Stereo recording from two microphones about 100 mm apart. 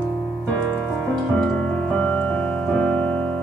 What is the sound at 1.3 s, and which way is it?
Music, 10° left (ahead or behind).